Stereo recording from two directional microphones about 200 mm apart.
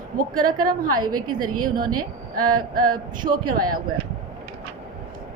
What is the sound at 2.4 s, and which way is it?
Speech, 45° right (ahead or behind).